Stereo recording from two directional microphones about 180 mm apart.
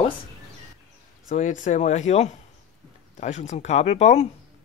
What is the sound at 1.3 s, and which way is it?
Speech, 45° left (ahead or behind).